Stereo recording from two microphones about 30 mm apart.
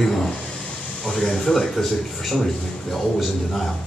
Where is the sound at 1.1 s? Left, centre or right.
Centre.